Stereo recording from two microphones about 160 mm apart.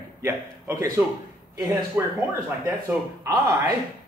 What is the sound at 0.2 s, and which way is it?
A man's voice, 15° right (ahead or behind).